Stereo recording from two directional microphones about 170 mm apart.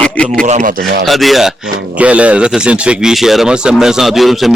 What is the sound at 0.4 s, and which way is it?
Speech, 50° right (ahead or behind).